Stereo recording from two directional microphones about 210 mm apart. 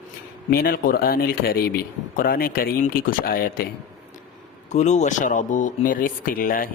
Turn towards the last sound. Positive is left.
turn(degrees=40)  # may be behind; listen again after turning